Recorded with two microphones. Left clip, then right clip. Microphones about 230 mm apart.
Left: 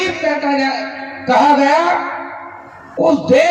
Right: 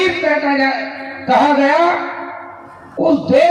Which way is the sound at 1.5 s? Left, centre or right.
Left.